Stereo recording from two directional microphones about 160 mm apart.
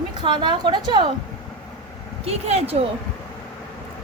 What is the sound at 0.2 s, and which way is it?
Speech, 30° right (ahead or behind).